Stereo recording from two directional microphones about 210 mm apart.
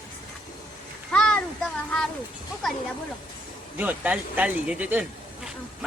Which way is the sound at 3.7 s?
5° right (ahead or behind).